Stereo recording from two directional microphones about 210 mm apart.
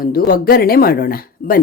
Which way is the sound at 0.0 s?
45° left (ahead or behind).